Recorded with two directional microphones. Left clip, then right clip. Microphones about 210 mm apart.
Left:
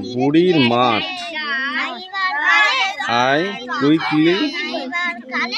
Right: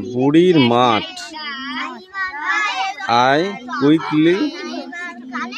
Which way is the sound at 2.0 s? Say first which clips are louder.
Left 4 dB; 30° left (ahead or behind).